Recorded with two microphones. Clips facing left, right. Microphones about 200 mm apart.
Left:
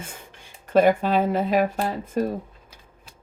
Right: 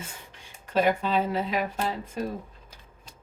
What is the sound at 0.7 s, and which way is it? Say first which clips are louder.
Speech: left 6 dB; 50° left (ahead or behind).